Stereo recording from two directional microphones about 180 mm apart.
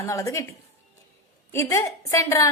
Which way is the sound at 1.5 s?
15° left (ahead or behind).